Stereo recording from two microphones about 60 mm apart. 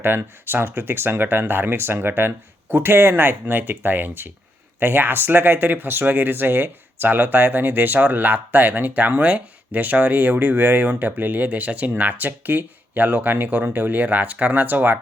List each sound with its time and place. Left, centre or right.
0.2 s speech: right